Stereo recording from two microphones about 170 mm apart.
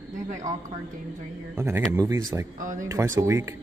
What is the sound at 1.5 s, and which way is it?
Speech, 15° right (ahead or behind).